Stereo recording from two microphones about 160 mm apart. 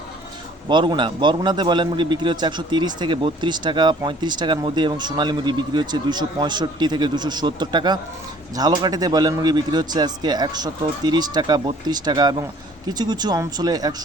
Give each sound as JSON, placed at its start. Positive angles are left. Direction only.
{"t": 0.7, "sound": "a man's voice", "side_deg": -30}